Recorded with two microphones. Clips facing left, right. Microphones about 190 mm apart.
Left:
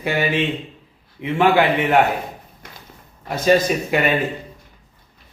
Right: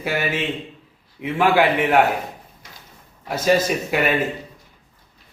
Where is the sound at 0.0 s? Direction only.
5° right (ahead or behind).